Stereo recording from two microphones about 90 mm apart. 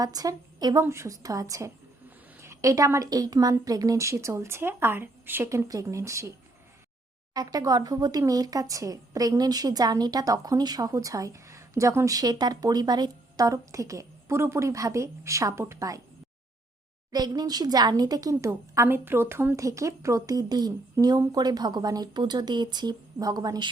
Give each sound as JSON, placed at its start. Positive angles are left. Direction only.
{"t": 0.0, "sound": "a woman's voice", "side_deg": -45}
{"t": 7.3, "sound": "a woman's voice", "side_deg": -45}
{"t": 17.1, "sound": "a woman's voice", "side_deg": -50}